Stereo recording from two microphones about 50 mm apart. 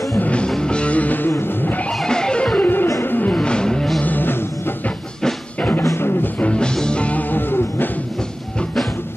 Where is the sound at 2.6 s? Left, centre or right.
Left.